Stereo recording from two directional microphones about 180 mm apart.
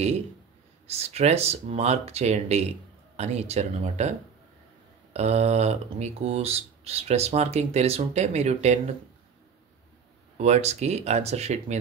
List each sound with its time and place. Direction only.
0.8 s speech: 35° right (ahead or behind)
5.1 s speech: 35° right (ahead or behind)
10.3 s speech: 40° right (ahead or behind)